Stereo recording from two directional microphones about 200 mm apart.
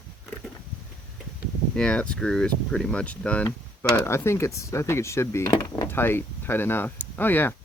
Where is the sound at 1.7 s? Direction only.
5° left (ahead or behind).